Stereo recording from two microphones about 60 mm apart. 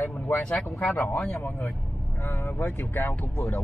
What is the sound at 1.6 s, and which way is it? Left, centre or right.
Speech, left.